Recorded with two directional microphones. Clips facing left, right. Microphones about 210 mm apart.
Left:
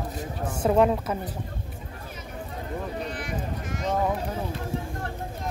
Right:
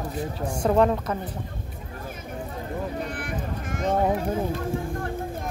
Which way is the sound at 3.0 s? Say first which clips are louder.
Right 1 dB; 55° right (ahead or behind).